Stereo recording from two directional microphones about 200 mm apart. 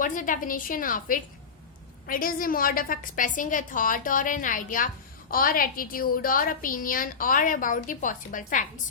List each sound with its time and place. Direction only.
0.0 s a woman's voice: 40° left (ahead or behind)